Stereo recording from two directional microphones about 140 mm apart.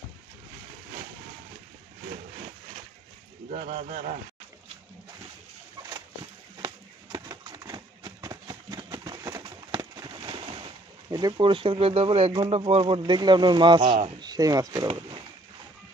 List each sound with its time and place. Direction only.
3.4 s speech: 70° right (ahead or behind)
6.6 s a sound: 30° right (ahead or behind)
11.1 s speech: 30° right (ahead or behind); by 13.0 s 45° right (ahead or behind)
13.0 s speech: 30° right (ahead or behind)